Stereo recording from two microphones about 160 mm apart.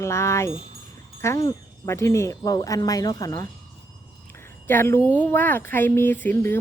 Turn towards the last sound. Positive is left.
turn(degrees=10)  # may be behind; listen again after turning